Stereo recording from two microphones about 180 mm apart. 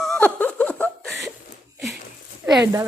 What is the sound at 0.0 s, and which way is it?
Laughter, 5° left (ahead or behind).